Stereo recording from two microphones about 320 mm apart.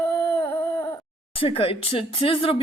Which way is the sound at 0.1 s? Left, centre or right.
Centre.